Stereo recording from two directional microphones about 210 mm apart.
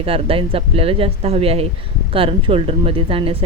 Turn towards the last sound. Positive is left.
turn(degrees=-25)  # may be behind; listen again after turning